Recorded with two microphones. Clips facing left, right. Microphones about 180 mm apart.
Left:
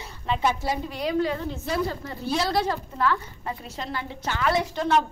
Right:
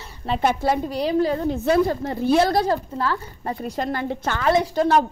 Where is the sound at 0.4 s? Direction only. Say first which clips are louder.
Right 6 dB; 55° right (ahead or behind).